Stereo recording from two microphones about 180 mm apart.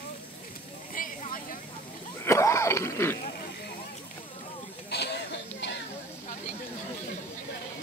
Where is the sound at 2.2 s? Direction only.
15° left (ahead or behind).